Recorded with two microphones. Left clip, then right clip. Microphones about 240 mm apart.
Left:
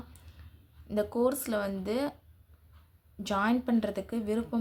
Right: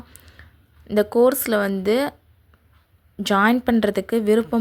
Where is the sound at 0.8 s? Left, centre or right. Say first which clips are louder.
Right 12 dB; right.